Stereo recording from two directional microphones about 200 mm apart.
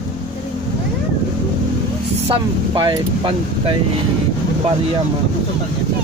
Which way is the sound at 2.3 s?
25° right (ahead or behind).